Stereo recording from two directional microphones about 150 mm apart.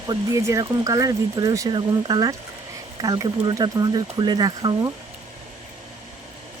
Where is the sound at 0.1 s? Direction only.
20° right (ahead or behind).